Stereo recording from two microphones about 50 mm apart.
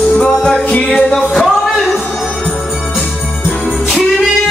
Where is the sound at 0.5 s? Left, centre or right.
Left.